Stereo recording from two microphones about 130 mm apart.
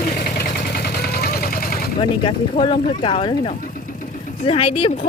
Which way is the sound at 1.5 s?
90° left.